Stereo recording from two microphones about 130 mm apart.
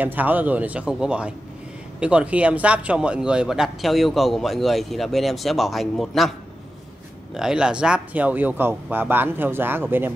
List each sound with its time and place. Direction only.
0.0 s a man's voice: 15° right (ahead or behind)
7.3 s speech: 5° right (ahead or behind)